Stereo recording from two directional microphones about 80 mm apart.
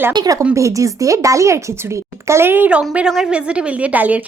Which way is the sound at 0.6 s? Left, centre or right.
Right.